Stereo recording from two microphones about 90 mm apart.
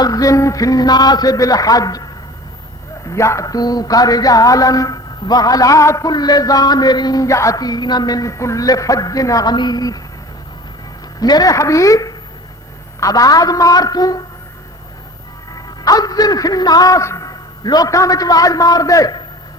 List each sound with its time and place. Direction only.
0.0 s speech: 40° left (ahead or behind)
3.1 s speech: 35° left (ahead or behind)
6.1 s speech: 50° left (ahead or behind)
11.2 s a woman's voice: 45° left (ahead or behind)
15.8 s speech: 45° left (ahead or behind)